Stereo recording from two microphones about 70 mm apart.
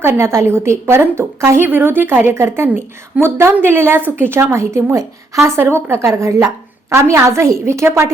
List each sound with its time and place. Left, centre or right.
0.0 s a woman's voice: right
1.6 s a woman's voice: right
2.3 s a woman's voice: right
5.5 s a woman's voice: right